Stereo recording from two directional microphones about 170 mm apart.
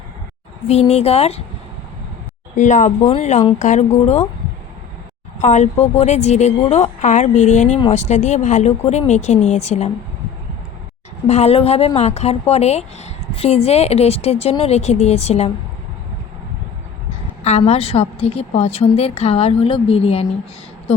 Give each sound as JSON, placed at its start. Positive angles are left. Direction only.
{"t": 0.7, "sound": "speech", "side_deg": 40}
{"t": 2.6, "sound": "a woman's voice", "side_deg": 45}
{"t": 5.4, "sound": "a woman's voice", "side_deg": 45}
{"t": 11.3, "sound": "speech", "side_deg": 40}
{"t": 17.4, "sound": "speech", "side_deg": 40}